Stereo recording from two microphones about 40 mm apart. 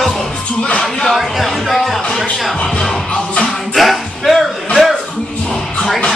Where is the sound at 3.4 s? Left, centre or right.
Centre.